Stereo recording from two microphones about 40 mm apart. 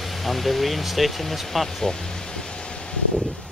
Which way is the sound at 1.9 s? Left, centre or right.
Centre.